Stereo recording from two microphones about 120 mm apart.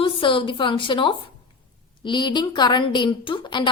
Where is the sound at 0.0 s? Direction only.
45° left (ahead or behind).